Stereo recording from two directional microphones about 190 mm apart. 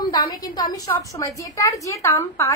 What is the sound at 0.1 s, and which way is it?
A woman's voice, 20° left (ahead or behind).